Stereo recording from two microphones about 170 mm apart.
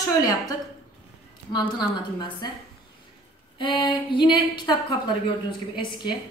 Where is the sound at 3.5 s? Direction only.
30° left (ahead or behind).